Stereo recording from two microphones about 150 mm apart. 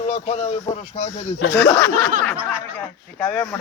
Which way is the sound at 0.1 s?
45° left (ahead or behind).